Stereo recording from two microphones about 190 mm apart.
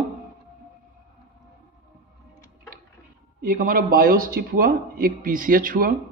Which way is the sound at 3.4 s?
45° right (ahead or behind).